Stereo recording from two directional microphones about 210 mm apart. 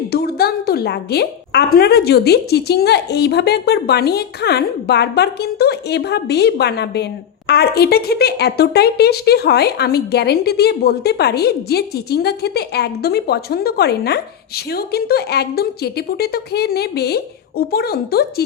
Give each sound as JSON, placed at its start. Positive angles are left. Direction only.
{"t": 0.1, "sound": "a woman's voice", "side_deg": 50}